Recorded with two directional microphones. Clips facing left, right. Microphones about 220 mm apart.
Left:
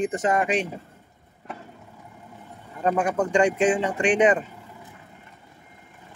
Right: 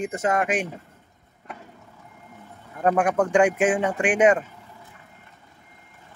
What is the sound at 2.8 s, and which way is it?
Speech, 10° right (ahead or behind).